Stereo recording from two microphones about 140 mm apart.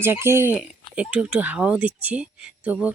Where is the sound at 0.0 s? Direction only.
15° right (ahead or behind).